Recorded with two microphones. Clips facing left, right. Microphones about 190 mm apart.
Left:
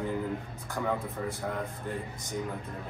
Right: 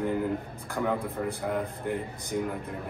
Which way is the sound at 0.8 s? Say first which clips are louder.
Right 3 dB; 10° right (ahead or behind).